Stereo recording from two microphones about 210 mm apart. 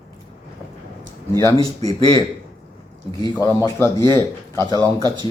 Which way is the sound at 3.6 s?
10° left (ahead or behind).